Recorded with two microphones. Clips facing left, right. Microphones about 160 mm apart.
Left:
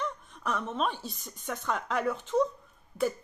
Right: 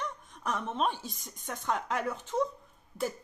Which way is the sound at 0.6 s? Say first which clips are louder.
Even; 15° right (ahead or behind).